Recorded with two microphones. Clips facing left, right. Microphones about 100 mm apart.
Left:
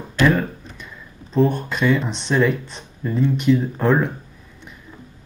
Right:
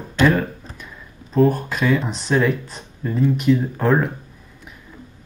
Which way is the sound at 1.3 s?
Centre (ahead or behind).